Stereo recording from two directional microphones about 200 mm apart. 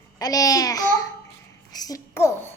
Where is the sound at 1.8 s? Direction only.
15° left (ahead or behind).